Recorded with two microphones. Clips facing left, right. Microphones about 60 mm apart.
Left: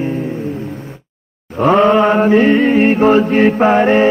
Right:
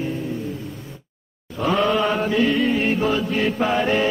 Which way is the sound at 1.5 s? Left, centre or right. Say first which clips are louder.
Left 9 dB; left.